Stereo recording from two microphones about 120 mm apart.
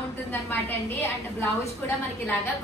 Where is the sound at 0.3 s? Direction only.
20° left (ahead or behind).